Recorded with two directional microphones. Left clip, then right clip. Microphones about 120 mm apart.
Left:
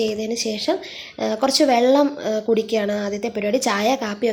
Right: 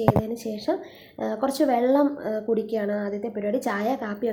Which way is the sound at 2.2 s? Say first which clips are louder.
Left 6 dB; 35° left (ahead or behind).